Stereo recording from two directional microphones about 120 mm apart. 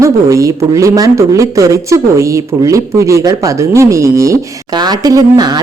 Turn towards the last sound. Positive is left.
turn(degrees=-35)  # may be behind; listen again after turning